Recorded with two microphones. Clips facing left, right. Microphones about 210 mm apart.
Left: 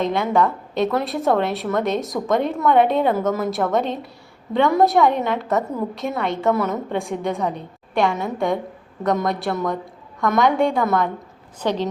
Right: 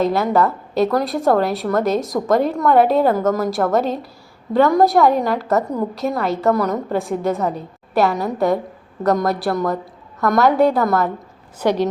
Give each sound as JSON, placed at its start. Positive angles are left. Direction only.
{"t": 0.0, "sound": "a woman's voice", "side_deg": -5}